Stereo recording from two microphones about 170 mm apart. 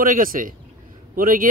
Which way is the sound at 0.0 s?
55° right (ahead or behind).